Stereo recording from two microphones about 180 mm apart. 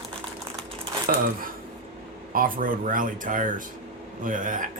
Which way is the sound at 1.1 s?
50° right (ahead or behind).